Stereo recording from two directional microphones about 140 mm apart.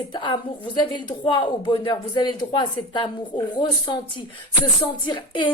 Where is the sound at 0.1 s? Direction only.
35° left (ahead or behind).